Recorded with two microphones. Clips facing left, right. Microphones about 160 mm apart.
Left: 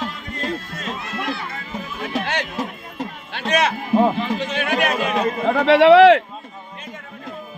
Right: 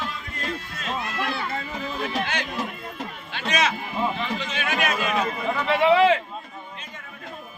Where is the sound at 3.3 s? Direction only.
60° left (ahead or behind).